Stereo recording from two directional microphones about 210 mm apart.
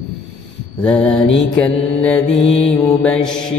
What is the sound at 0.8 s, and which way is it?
Mantra, 5° left (ahead or behind).